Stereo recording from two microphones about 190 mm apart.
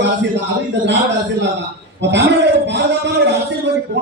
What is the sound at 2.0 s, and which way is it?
Speech, 65° right (ahead or behind).